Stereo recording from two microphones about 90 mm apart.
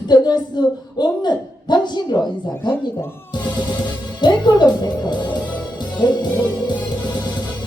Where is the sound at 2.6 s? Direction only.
25° left (ahead or behind).